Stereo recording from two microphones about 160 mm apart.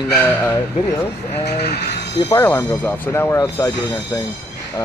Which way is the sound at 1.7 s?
90° left.